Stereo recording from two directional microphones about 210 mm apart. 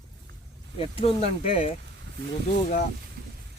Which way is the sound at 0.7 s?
25° left (ahead or behind).